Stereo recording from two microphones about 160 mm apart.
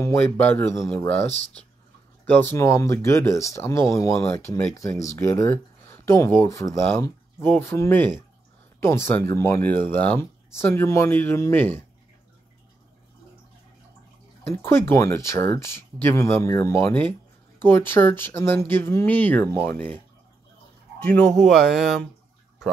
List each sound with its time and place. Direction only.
0.0 s speech: 15° left (ahead or behind)
2.2 s speech: 10° left (ahead or behind)
14.6 s speech: 15° left (ahead or behind)
21.0 s speech: 5° left (ahead or behind)